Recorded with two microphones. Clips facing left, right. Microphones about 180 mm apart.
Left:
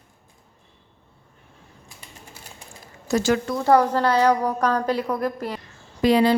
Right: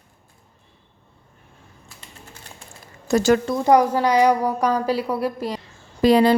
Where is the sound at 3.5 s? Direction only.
15° right (ahead or behind).